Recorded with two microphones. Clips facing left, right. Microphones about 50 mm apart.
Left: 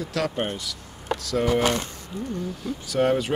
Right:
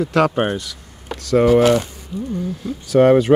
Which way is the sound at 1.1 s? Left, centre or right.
Right.